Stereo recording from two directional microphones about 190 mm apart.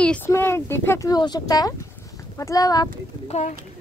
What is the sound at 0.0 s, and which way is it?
A woman's voice, 10° left (ahead or behind).